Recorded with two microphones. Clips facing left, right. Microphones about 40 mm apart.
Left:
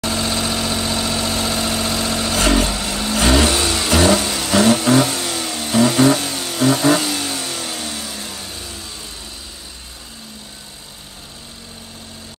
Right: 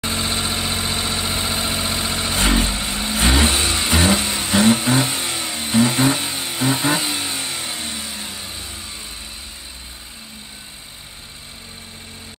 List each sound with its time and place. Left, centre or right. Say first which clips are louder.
0.0 s vehicle: left 2 dB; right